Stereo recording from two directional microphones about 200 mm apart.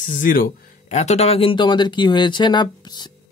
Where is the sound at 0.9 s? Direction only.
35° left (ahead or behind).